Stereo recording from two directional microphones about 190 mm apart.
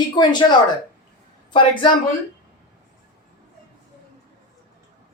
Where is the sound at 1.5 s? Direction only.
25° left (ahead or behind).